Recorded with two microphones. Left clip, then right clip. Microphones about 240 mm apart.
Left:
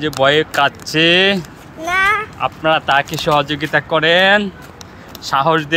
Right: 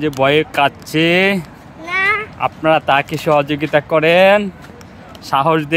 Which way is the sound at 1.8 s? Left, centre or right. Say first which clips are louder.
Left 1 dB; centre.